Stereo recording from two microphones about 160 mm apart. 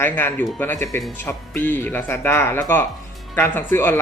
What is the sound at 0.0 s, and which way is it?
Speech, 10° left (ahead or behind).